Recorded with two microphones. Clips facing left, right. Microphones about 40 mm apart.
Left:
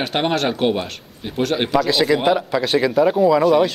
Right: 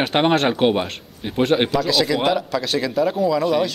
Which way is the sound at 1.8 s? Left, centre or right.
Centre.